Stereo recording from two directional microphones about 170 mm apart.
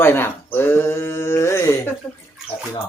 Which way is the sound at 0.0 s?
15° left (ahead or behind).